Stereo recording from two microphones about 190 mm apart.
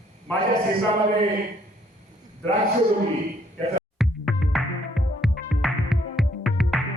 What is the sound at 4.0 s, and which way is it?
Music, centre (ahead or behind).